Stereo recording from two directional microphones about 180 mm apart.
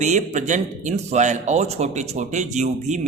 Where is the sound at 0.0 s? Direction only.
40° right (ahead or behind).